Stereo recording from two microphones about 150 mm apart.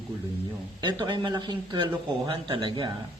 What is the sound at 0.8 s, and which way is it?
Speech, 30° right (ahead or behind).